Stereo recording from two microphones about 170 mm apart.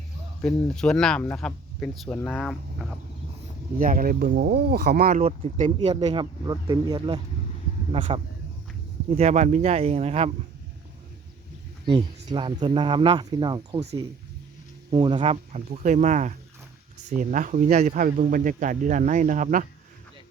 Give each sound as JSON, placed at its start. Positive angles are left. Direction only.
{"t": 0.4, "sound": "speech", "side_deg": 5}
{"t": 3.8, "sound": "speech", "side_deg": -55}
{"t": 5.2, "sound": "speech", "side_deg": -40}
{"t": 6.4, "sound": "speech", "side_deg": -20}
{"t": 9.1, "sound": "speech", "side_deg": -40}
{"t": 12.3, "sound": "speech", "side_deg": -25}
{"t": 14.8, "sound": "speech", "side_deg": -25}